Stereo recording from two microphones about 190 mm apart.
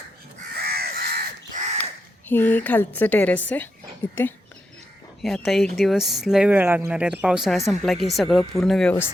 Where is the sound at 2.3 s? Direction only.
10° left (ahead or behind).